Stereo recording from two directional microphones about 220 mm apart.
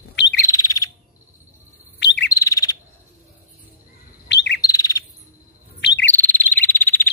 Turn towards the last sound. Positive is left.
turn(degrees=10)  # may be behind; listen again after turning